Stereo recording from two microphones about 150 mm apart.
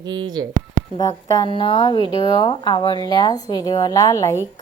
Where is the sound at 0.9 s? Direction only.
25° left (ahead or behind).